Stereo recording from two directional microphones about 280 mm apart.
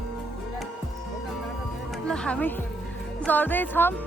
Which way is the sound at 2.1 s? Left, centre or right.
Centre.